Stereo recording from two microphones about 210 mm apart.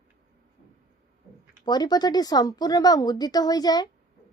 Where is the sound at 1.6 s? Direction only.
20° left (ahead or behind).